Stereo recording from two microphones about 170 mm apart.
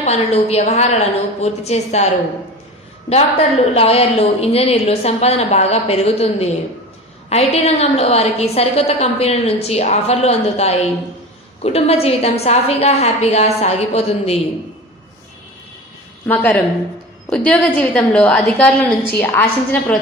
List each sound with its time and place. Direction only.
0.0 s a woman's voice: 40° left (ahead or behind)
3.7 s a woman's voice: 35° left (ahead or behind)
16.3 s a woman's voice: 10° left (ahead or behind)